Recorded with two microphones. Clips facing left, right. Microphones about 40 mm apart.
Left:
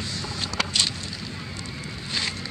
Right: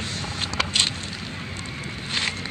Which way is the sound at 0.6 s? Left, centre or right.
Right.